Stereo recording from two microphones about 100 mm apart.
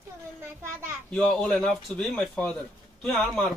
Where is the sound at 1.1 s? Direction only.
10° left (ahead or behind).